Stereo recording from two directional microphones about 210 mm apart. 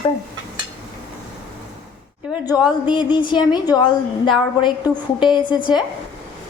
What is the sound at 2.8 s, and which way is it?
Speech, 25° left (ahead or behind).